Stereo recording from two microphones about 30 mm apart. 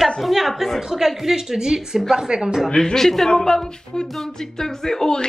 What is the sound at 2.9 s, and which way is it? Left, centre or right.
Speech, centre.